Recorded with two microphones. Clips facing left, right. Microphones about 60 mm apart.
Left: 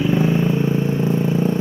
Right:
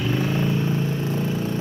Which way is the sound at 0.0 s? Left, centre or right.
Centre.